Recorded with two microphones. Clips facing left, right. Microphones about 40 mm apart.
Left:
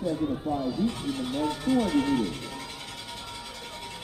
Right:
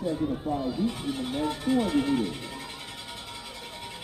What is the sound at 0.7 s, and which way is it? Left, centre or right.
Music, centre.